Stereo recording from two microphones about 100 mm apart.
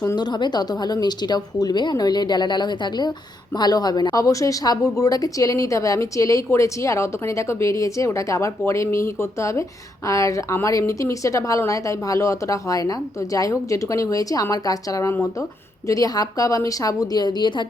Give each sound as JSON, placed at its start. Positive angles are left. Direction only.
{"t": 0.2, "sound": "a woman's voice", "side_deg": 45}